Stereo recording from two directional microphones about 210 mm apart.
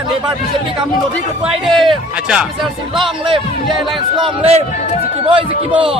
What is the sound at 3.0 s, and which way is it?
A man's voice, 25° right (ahead or behind).